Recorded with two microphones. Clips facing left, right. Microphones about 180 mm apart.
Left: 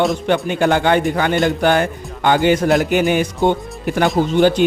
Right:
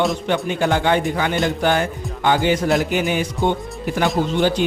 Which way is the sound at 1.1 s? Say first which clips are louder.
Left 4 dB; 55° left (ahead or behind).